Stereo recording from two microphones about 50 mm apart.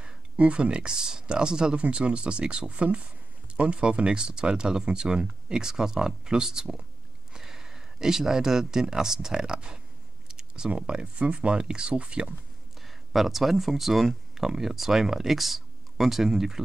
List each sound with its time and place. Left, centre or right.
0.0 s speech: right
10.2 s a sound: centre
10.9 s speech: centre
12.8 s speech: centre